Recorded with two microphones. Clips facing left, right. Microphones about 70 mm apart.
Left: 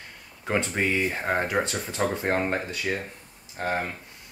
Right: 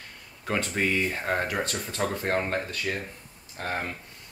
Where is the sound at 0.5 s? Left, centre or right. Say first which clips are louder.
Left 1 dB; centre.